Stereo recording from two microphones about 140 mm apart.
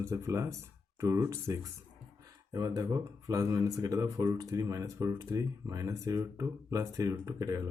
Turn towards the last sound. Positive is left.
turn(degrees=-25)  # may be behind; listen again after turning